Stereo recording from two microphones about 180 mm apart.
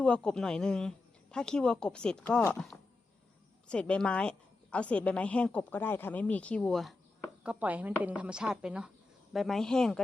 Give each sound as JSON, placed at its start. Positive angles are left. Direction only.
{"t": 0.0, "sound": "a woman's voice", "side_deg": 5}
{"t": 3.7, "sound": "a woman's voice", "side_deg": 5}